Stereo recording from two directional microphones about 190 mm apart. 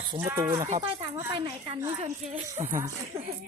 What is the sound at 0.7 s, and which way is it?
Speech, 35° right (ahead or behind).